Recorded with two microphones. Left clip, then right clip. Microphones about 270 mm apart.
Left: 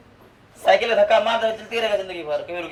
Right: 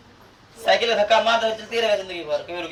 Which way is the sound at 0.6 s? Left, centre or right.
Centre.